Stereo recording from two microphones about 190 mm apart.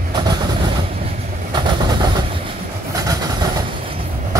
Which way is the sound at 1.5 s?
25° right (ahead or behind).